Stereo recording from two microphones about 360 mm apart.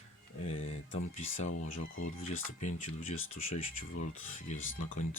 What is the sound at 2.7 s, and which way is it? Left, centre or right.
Speech, left.